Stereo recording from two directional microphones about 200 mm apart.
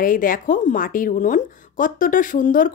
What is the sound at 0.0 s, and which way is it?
Speech, 45° left (ahead or behind).